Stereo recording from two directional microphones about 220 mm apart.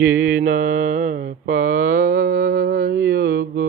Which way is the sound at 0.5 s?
35° right (ahead or behind).